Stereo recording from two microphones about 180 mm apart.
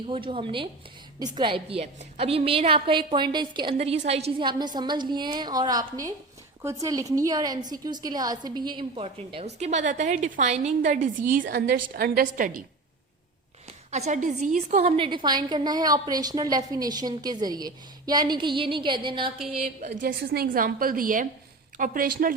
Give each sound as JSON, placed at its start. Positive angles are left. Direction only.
{"t": 0.1, "sound": "a woman's voice", "side_deg": -30}
{"t": 13.9, "sound": "a woman's voice", "side_deg": -40}
{"t": 19.6, "sound": "a woman's voice", "side_deg": -50}